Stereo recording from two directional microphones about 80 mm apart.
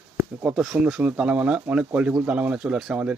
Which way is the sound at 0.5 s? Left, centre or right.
Centre.